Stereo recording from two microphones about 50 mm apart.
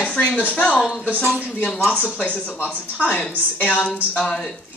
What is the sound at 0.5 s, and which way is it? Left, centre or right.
Speech, left.